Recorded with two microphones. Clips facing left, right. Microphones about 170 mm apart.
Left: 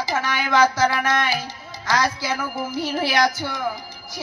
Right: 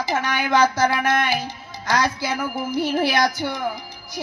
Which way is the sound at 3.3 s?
20° right (ahead or behind).